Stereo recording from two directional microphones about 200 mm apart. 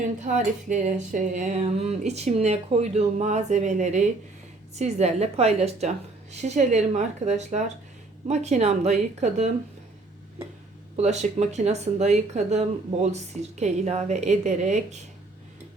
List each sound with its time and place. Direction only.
0.3 s speech: 35° right (ahead or behind)
10.9 s speech: 35° right (ahead or behind)